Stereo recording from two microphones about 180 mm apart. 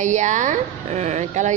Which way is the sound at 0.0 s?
40° right (ahead or behind).